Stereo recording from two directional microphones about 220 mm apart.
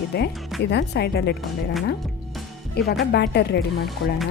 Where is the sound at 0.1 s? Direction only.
50° left (ahead or behind).